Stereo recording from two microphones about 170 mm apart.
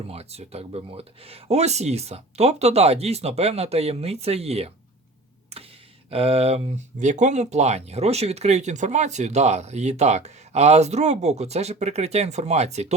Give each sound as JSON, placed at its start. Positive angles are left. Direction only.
{"t": 0.1, "sound": "speech", "side_deg": -35}
{"t": 6.1, "sound": "speech", "side_deg": -35}